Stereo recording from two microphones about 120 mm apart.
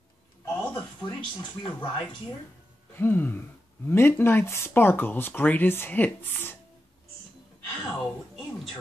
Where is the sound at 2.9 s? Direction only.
15° left (ahead or behind).